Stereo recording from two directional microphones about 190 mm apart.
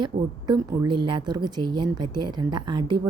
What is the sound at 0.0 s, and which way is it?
A woman's voice, 20° right (ahead or behind).